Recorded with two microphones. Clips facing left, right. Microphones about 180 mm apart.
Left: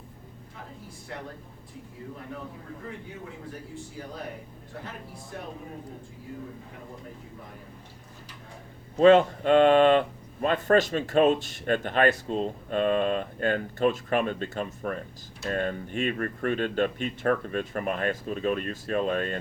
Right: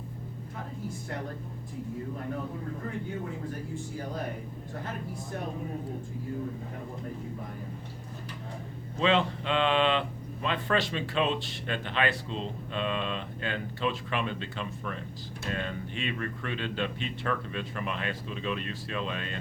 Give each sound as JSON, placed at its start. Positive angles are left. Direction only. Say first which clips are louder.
{"t": 9.0, "sound": "speech", "louder": "left 9 dB", "side_deg": 50}